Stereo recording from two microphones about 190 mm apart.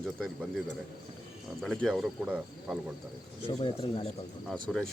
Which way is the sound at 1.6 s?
Centre (ahead or behind).